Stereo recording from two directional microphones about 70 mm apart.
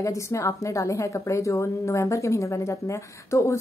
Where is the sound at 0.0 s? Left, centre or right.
Left.